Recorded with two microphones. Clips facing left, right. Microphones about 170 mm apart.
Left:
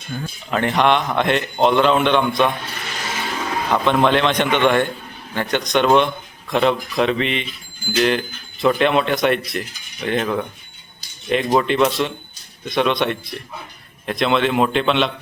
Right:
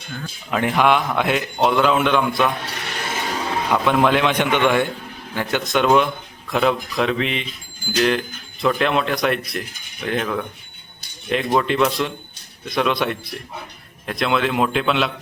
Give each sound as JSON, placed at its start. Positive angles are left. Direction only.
{"t": 0.5, "sound": "speech", "side_deg": -5}
{"t": 2.8, "sound": "a sound", "side_deg": -60}
{"t": 3.7, "sound": "a man's voice", "side_deg": -5}